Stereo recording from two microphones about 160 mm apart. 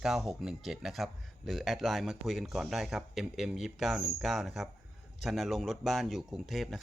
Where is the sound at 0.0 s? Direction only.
Centre (ahead or behind).